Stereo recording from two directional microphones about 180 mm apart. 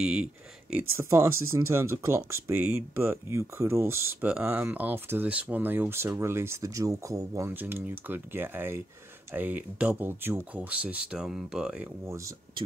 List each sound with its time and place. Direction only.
0.0 s speech: 5° right (ahead or behind)
12.1 s speech: 20° right (ahead or behind)